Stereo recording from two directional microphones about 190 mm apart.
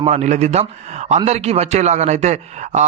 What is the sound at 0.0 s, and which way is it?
A man's voice, 35° right (ahead or behind).